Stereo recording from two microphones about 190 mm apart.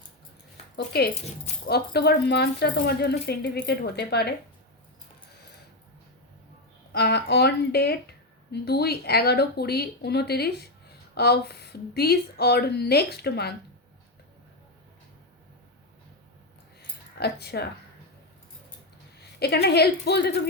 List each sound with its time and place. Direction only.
1.6 s speech: 55° left (ahead or behind)
6.9 s speech: 60° left (ahead or behind)
16.8 s keys jangling: 60° left (ahead or behind)
19.4 s speech: 60° left (ahead or behind)